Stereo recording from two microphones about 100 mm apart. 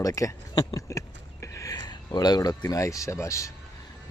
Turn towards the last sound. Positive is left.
turn(degrees=30)  # may be behind; listen again after turning